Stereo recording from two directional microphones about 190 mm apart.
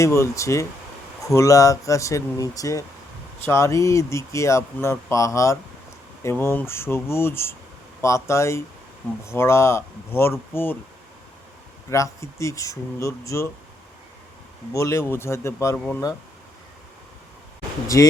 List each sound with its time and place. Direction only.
0.0 s speech: 15° left (ahead or behind)
11.9 s speech: 15° left (ahead or behind)
14.7 s speech: 15° left (ahead or behind)
17.9 s speech: 15° left (ahead or behind)